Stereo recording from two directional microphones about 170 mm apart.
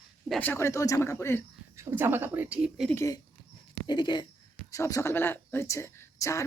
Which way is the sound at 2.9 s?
15° left (ahead or behind).